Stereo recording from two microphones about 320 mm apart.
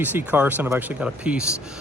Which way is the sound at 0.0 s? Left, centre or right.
Centre.